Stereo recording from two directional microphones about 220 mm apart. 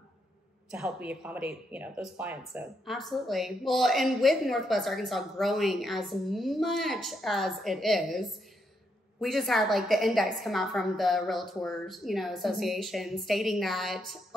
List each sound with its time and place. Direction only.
0.7 s speech: 5° right (ahead or behind)